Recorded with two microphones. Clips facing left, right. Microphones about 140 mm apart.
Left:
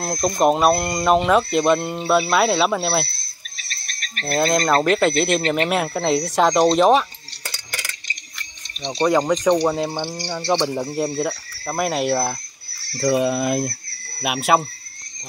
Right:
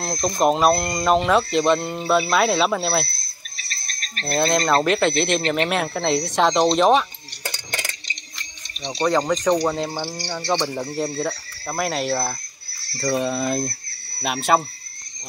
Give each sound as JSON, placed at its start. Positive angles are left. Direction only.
{"t": 0.0, "sound": "speech", "side_deg": 0}
{"t": 3.5, "sound": "insect", "side_deg": -35}
{"t": 4.7, "sound": "speech", "side_deg": 0}
{"t": 9.0, "sound": "speech", "side_deg": 10}